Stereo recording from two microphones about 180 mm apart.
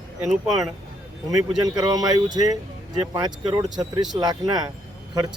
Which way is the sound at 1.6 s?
20° right (ahead or behind).